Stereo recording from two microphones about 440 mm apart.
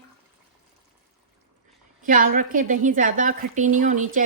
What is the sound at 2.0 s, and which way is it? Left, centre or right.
Speech, centre.